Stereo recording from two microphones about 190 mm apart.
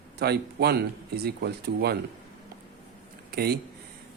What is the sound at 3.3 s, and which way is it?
Speech, 55° right (ahead or behind).